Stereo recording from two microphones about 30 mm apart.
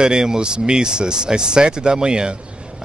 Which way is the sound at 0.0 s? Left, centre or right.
Right.